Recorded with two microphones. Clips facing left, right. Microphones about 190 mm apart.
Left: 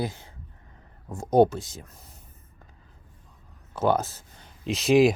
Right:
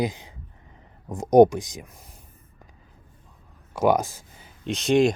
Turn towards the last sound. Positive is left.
turn(degrees=5)  # may be behind; listen again after turning